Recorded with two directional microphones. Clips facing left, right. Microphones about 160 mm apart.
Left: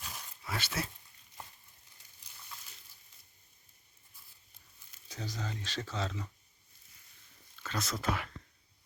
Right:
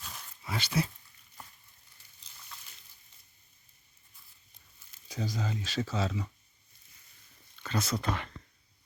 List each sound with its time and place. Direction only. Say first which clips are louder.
0.0 s a sound: even; 5° left (ahead or behind)
5.0 s speech: right 6 dB; 10° right (ahead or behind)
7.6 s speech: right 3 dB; centre (ahead or behind)